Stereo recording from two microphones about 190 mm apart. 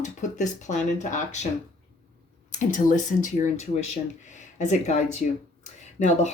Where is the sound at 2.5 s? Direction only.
40° left (ahead or behind).